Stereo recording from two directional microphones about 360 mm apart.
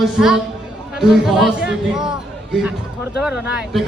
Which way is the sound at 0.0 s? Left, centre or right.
Centre.